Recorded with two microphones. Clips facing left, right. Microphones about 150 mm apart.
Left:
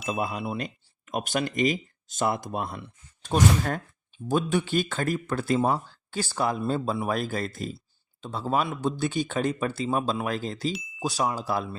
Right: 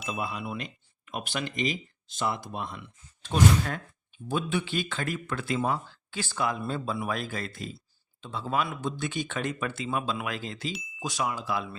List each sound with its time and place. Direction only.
0.1 s speech: 45° left (ahead or behind)
10.7 s speech: centre (ahead or behind)
11.0 s speech: 35° left (ahead or behind)